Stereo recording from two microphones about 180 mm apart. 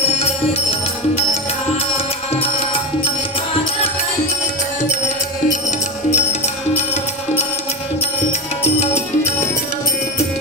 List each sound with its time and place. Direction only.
2.4 s music: 30° left (ahead or behind)
6.1 s music: 40° left (ahead or behind)